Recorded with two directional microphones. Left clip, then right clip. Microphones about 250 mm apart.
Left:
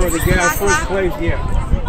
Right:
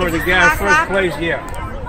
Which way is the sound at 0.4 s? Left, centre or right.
Centre.